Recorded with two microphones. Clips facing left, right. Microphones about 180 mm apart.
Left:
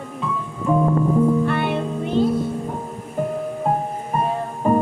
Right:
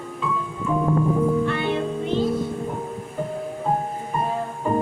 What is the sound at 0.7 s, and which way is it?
Music, 40° left (ahead or behind).